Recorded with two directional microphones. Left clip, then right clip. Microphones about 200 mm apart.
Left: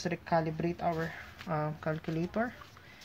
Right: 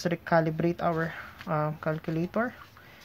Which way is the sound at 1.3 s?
20° right (ahead or behind).